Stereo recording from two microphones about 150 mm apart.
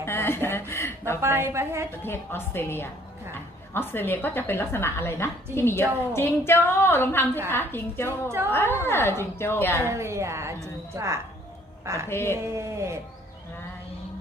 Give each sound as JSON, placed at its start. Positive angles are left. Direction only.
{"t": 0.0, "sound": "speech", "side_deg": 15}
{"t": 1.2, "sound": "a woman's voice", "side_deg": -15}
{"t": 2.0, "sound": "a woman's voice", "side_deg": 15}
{"t": 9.9, "sound": "a woman's voice", "side_deg": -20}
{"t": 12.0, "sound": "a woman's voice", "side_deg": 15}
{"t": 12.5, "sound": "a woman's voice", "side_deg": -20}